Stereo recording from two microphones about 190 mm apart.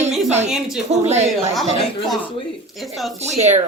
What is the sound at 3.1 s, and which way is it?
Speech, 35° right (ahead or behind).